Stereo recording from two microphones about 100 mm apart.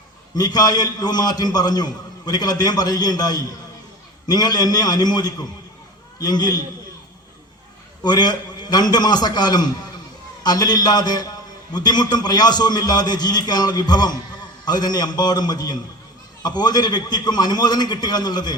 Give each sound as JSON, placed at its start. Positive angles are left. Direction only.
{"t": 0.3, "sound": "a man's voice", "side_deg": 40}
{"t": 8.0, "sound": "a man's voice", "side_deg": 45}